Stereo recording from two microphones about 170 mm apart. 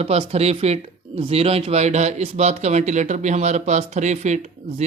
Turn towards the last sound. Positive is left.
turn(degrees=-40)  # may be behind; listen again after turning